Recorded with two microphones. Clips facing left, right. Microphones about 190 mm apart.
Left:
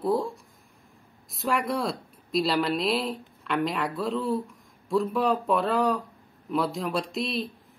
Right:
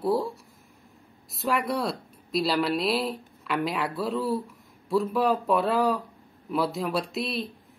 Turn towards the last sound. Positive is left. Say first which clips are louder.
# left 1 dB
turn(degrees=0)  # may be behind; listen again after turning